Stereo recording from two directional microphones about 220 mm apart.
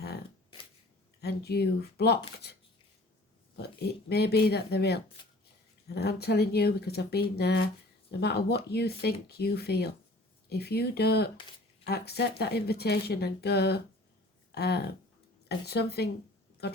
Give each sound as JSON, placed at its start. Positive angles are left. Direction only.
{"t": 1.2, "sound": "speech", "side_deg": 45}
{"t": 3.5, "sound": "speech", "side_deg": 50}
{"t": 16.6, "sound": "a sound", "side_deg": 45}